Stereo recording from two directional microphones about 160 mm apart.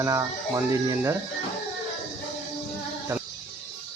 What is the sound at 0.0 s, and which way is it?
Speech, 20° right (ahead or behind).